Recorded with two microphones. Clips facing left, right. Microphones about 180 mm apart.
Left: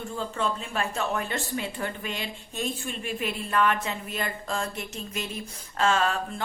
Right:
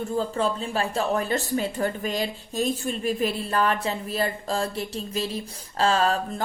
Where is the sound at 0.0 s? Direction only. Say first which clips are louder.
Right 5 dB; 35° right (ahead or behind).